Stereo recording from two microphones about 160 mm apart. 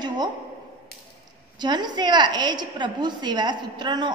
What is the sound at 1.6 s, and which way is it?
A woman's voice, 25° right (ahead or behind).